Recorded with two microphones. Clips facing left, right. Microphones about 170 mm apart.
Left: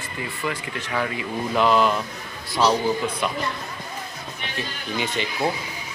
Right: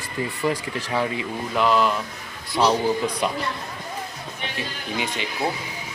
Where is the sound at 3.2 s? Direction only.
30° right (ahead or behind).